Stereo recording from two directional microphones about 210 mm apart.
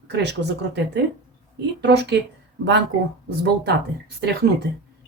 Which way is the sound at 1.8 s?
55° right (ahead or behind).